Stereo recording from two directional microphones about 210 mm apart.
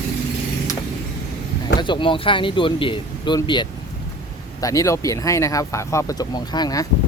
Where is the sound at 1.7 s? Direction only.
20° left (ahead or behind).